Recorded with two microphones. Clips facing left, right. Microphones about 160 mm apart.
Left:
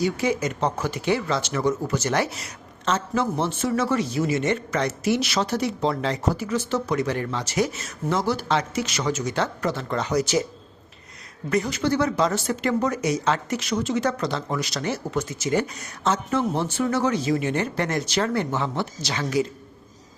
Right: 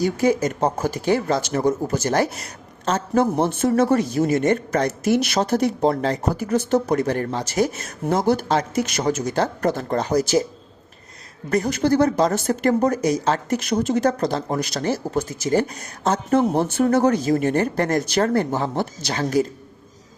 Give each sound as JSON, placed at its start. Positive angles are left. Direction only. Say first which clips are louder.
{"t": 0.0, "sound": "speech", "louder": "right 4 dB", "side_deg": -45}
{"t": 11.4, "sound": "speech", "louder": "right 3 dB", "side_deg": -45}